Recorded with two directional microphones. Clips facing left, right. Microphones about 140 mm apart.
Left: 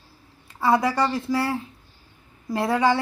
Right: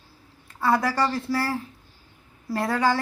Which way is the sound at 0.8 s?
20° left (ahead or behind).